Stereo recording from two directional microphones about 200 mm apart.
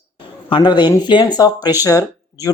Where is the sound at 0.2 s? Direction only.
25° left (ahead or behind).